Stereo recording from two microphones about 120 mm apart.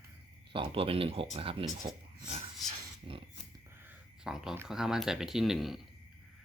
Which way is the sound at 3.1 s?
45° right (ahead or behind).